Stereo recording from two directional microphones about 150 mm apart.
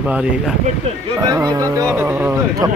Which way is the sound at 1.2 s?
25° right (ahead or behind).